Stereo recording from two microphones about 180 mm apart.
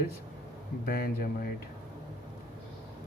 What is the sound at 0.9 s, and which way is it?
Speech, 55° left (ahead or behind).